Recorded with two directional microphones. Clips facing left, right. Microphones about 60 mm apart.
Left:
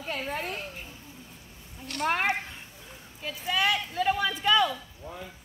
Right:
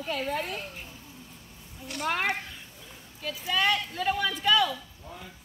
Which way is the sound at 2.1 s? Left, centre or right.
Left.